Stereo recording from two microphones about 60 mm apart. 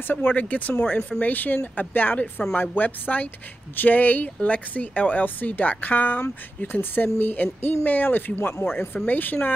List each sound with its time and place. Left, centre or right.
0.0 s speech: left